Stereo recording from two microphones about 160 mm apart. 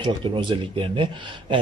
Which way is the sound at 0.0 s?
30° right (ahead or behind).